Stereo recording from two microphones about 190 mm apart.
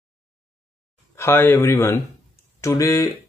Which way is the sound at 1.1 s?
10° left (ahead or behind).